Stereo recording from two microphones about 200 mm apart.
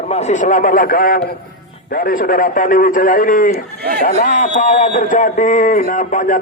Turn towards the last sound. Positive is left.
turn(degrees=40)  # may be behind; listen again after turning